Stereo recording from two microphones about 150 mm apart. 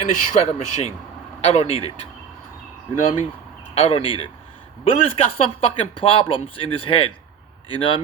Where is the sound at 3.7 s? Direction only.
40° left (ahead or behind).